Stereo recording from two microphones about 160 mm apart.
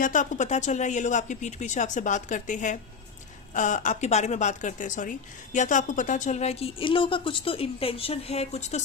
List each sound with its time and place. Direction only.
0.0 s a woman's voice: 55° left (ahead or behind)